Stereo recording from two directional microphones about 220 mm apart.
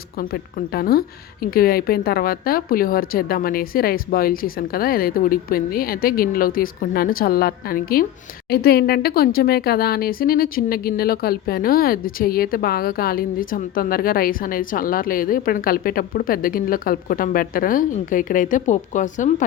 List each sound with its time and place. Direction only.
0.7 s speech: 45° left (ahead or behind)